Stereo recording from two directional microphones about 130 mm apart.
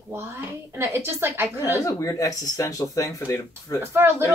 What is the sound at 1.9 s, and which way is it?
Speech, 25° left (ahead or behind).